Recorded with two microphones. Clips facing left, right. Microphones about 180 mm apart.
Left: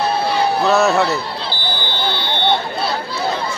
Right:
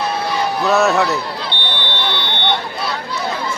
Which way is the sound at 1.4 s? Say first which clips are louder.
Even; 30° left (ahead or behind).